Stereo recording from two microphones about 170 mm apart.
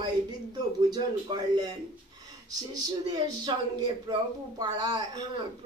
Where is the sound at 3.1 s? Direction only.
25° right (ahead or behind).